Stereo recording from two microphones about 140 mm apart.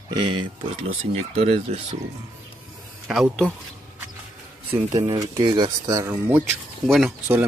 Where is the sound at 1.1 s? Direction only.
45° right (ahead or behind).